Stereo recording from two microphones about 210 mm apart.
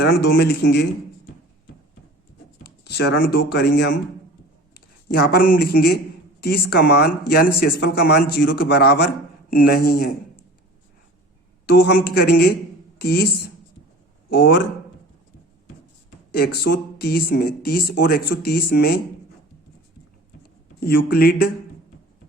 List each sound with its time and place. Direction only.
0.0 s speech: 45° left (ahead or behind)
2.8 s speech: 50° left (ahead or behind)
5.1 s speech: 45° left (ahead or behind)
11.6 s speech: 50° left (ahead or behind)
14.3 s speech: 50° left (ahead or behind)
16.4 s speech: 50° left (ahead or behind)
20.8 s speech: 45° left (ahead or behind)